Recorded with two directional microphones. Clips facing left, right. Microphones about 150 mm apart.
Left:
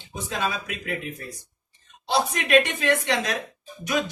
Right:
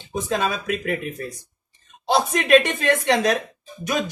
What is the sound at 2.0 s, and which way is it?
Speech, 45° right (ahead or behind).